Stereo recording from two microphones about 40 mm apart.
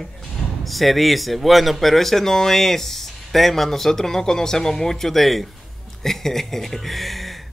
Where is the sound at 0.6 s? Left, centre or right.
Centre.